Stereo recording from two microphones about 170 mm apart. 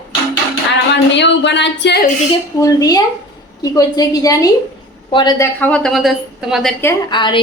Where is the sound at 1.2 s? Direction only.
90° left.